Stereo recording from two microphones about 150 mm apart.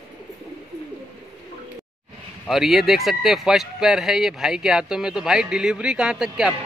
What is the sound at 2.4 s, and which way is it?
Speech, centre (ahead or behind).